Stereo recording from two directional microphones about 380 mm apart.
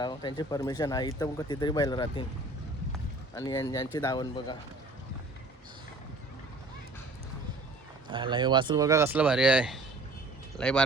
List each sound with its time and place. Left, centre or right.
0.0 s speech: centre
3.3 s speech: centre
8.1 s speech: centre